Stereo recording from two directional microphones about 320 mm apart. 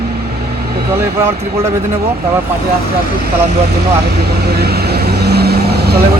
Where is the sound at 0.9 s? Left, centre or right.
Centre.